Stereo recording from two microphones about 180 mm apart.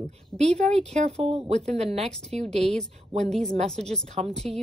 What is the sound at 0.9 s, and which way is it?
A woman's voice, 40° right (ahead or behind).